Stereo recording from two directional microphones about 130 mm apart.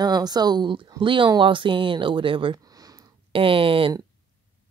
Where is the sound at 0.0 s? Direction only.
30° right (ahead or behind).